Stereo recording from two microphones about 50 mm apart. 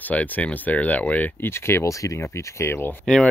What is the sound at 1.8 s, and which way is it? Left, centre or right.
Speech, left.